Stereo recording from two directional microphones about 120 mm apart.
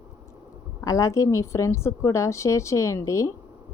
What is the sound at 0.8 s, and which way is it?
A woman's voice, 30° left (ahead or behind).